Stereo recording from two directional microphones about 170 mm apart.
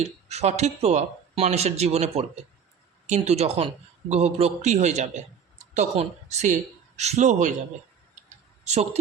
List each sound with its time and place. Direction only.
0.3 s speech: 40° right (ahead or behind)
8.6 s speech: 40° right (ahead or behind)